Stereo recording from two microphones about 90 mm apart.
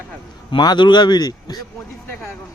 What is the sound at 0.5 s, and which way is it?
Speech, 55° left (ahead or behind).